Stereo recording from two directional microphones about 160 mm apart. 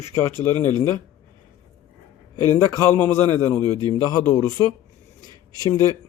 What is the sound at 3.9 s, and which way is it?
Speech, 25° left (ahead or behind).